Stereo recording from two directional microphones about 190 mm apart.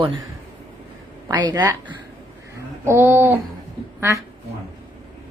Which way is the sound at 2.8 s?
10° right (ahead or behind).